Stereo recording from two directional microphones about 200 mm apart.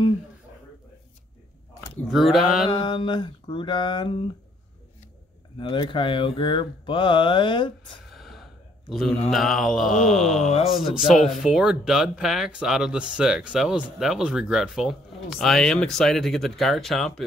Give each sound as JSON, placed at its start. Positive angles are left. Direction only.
{"t": 2.0, "sound": "speech", "side_deg": 0}
{"t": 2.7, "sound": "speech", "side_deg": 25}
{"t": 5.6, "sound": "speech", "side_deg": 25}
{"t": 8.1, "sound": "gasp", "side_deg": 0}
{"t": 9.3, "sound": "speech", "side_deg": 0}
{"t": 10.4, "sound": "speech", "side_deg": 30}
{"t": 10.7, "sound": "speech", "side_deg": 0}